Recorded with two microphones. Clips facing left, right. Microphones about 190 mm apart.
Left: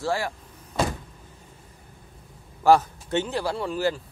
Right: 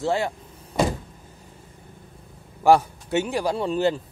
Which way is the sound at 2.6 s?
10° right (ahead or behind).